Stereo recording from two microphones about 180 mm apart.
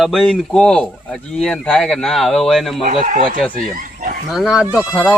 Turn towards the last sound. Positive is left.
turn(degrees=10)  # may be behind; listen again after turning